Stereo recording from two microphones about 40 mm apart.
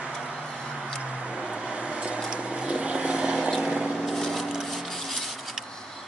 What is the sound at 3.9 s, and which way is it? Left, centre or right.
Wood, centre.